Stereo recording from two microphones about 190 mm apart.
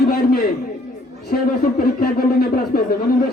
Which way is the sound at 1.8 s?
50° left (ahead or behind).